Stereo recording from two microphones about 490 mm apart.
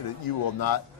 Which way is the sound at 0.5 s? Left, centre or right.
Left.